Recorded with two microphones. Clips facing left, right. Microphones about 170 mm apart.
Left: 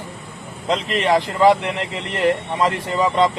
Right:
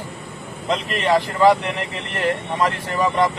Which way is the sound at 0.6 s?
20° left (ahead or behind).